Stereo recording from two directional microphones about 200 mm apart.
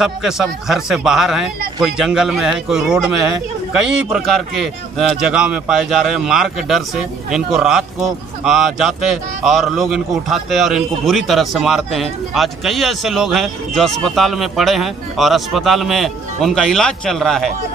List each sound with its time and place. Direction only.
0.0 s speech: centre (ahead or behind)